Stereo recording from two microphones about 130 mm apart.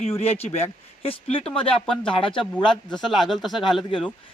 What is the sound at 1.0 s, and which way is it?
Speech, 45° left (ahead or behind).